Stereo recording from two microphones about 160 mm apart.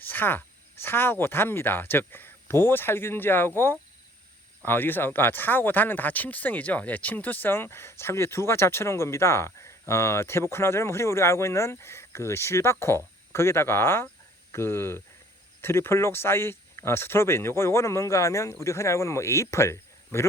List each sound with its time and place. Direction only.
0.0 s speech: 10° left (ahead or behind)